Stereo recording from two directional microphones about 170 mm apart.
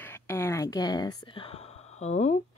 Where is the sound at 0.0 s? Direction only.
15° left (ahead or behind); by 2.3 s 40° left (ahead or behind).